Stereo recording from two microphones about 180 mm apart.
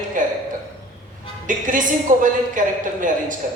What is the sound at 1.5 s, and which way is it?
A man's voice, 45° right (ahead or behind).